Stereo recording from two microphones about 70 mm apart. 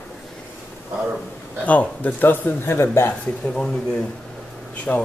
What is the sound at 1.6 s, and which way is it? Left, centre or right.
Speech, left.